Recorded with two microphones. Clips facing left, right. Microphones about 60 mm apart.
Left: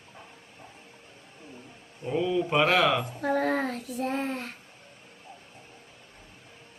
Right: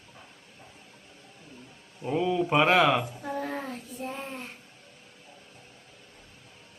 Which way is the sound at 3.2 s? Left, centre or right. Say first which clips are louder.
Left 7 dB; left.